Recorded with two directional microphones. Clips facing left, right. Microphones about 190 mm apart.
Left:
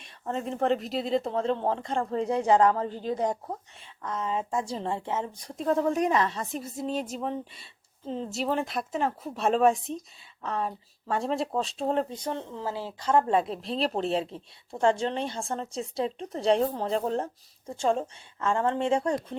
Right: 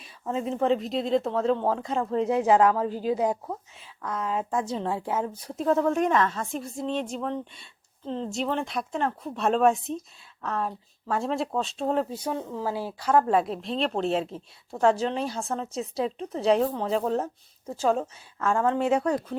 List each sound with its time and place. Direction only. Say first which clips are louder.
0.0 s speech: right 3 dB; 5° right (ahead or behind)